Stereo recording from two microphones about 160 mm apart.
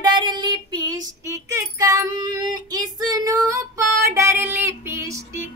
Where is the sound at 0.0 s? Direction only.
25° right (ahead or behind).